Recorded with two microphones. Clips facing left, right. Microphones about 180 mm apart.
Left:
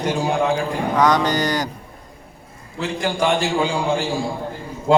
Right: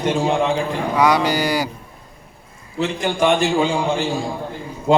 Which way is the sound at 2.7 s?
20° right (ahead or behind).